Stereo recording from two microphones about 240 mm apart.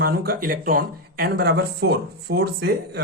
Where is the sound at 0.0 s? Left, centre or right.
Right.